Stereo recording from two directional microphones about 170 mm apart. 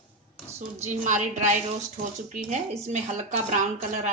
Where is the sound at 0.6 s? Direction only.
40° right (ahead or behind).